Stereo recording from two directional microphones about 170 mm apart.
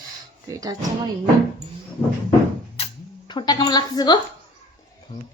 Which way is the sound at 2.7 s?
30° left (ahead or behind).